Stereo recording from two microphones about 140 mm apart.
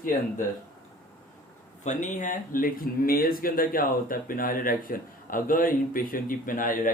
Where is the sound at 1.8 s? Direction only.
60° left (ahead or behind).